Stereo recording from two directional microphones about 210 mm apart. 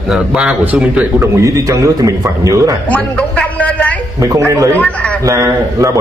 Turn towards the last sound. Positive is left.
turn(degrees=-15)  # may be behind; listen again after turning